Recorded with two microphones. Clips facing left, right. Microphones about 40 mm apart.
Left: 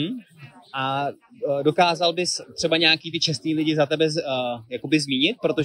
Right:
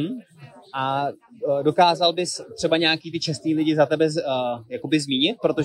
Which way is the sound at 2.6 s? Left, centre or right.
Left.